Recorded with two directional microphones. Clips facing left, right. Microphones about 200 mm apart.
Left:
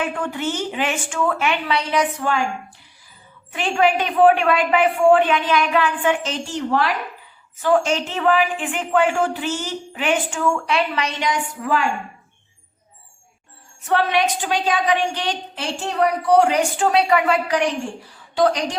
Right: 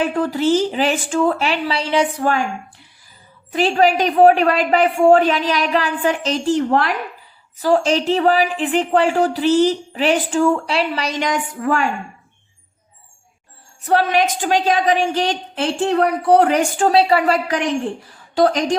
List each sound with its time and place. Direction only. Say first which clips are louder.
0.0 s a woman's voice: right 6 dB; 35° right (ahead or behind)
3.5 s a woman's voice: right 3 dB; 35° right (ahead or behind)
7.6 s a woman's voice: right 2 dB; 35° right (ahead or behind)
11.2 s a woman's voice: right 3 dB; 50° right (ahead or behind)
13.8 s a woman's voice: right 3 dB; 40° right (ahead or behind)
17.0 s a woman's voice: right 2 dB; 30° right (ahead or behind)